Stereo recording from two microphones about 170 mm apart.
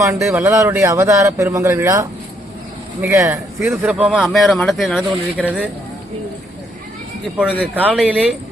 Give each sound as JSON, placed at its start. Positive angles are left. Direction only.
{"t": 0.3, "sound": "speech", "side_deg": -15}
{"t": 3.7, "sound": "a man's voice", "side_deg": 0}
{"t": 7.6, "sound": "a man's voice", "side_deg": -10}